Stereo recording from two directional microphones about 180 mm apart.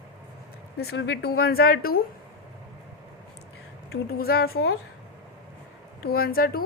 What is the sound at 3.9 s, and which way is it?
Speech, 60° left (ahead or behind).